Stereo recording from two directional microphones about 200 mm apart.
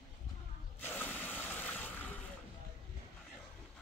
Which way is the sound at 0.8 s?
10° left (ahead or behind).